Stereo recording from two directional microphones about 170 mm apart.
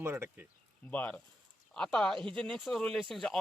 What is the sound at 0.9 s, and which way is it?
Speech, 10° left (ahead or behind).